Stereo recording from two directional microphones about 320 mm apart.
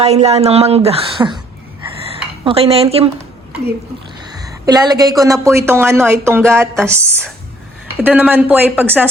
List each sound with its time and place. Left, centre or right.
0.0 s a woman's voice: centre
2.4 s a woman's voice: centre
4.4 s a woman's voice: centre